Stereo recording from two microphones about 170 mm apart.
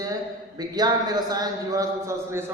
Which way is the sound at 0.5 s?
25° right (ahead or behind).